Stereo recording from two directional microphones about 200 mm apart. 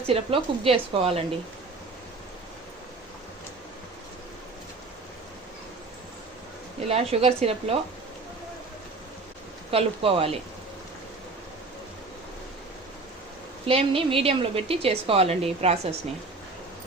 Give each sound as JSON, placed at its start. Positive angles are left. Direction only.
{"t": 0.1, "sound": "a woman's voice", "side_deg": -25}
{"t": 6.8, "sound": "a woman's voice", "side_deg": -30}
{"t": 9.7, "sound": "a woman's voice", "side_deg": -30}
{"t": 13.7, "sound": "a woman's voice", "side_deg": -25}